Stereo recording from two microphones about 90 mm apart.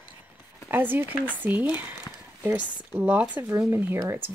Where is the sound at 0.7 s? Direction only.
20° right (ahead or behind).